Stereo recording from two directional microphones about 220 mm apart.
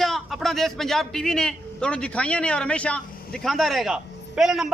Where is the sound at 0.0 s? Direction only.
Centre (ahead or behind).